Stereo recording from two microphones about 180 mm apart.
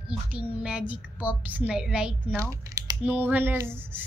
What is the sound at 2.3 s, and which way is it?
Speech, 20° right (ahead or behind).